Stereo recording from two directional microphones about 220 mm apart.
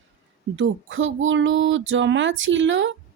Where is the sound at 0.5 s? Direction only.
60° right (ahead or behind).